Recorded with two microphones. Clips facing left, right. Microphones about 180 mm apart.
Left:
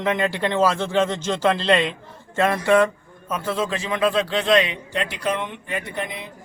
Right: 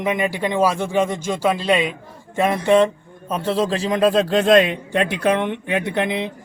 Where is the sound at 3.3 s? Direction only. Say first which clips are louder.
Right 4 dB; 30° right (ahead or behind); by 6.3 s 75° right (ahead or behind).